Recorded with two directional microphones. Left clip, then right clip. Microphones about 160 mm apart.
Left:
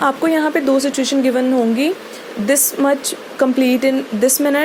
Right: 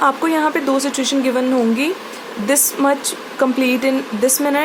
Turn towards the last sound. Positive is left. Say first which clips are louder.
# left 2 dB
turn(degrees=25)  # may be behind; listen again after turning